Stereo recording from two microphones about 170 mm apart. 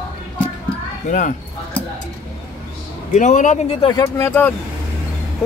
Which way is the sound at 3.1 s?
45° left (ahead or behind).